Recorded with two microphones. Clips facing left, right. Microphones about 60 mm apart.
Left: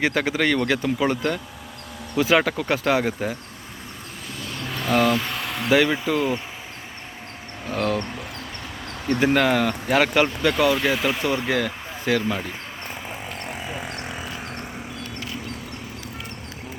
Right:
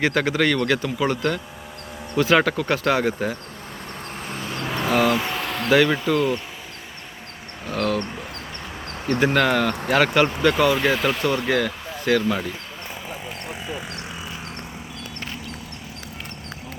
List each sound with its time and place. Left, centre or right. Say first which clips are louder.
0.0 s speech: right 1 dB; centre
4.3 s a sound: right 3 dB; right
4.6 s a sound: right 4 dB; centre
4.9 s speech: even; centre
7.7 s speech: right 1 dB; centre
9.3 s speech: even; centre
10.5 s speech: right 1 dB; centre
11.2 s speech: right 2 dB; centre
13.4 s a sound: left 1 dB; left